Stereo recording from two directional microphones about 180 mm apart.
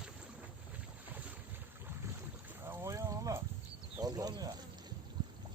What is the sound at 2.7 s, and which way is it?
Boat, 15° right (ahead or behind).